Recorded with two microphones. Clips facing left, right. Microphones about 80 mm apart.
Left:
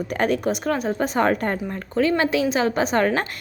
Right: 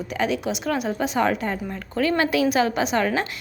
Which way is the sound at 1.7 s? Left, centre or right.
Left.